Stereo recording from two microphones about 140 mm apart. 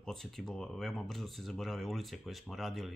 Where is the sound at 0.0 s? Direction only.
5° left (ahead or behind).